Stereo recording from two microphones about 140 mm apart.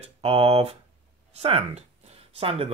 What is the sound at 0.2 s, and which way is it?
Speech, 45° right (ahead or behind).